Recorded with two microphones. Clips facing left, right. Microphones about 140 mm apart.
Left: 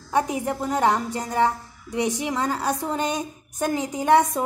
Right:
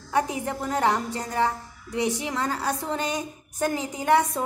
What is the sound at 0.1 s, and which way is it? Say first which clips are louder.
A woman's voice: left 2 dB; 15° left (ahead or behind).